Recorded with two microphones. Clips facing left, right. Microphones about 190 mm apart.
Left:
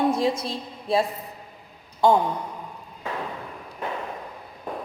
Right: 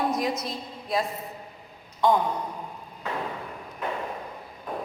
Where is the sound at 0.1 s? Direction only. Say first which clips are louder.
Left 4 dB; 30° left (ahead or behind).